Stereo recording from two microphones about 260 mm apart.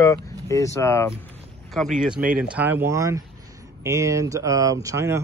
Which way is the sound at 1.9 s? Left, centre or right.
Centre.